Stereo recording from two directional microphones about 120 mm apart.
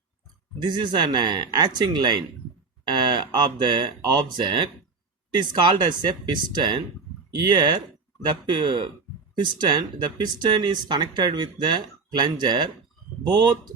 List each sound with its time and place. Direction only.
0.6 s speech: 40° right (ahead or behind)